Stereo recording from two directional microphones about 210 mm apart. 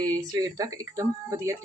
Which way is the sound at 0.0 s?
15° right (ahead or behind).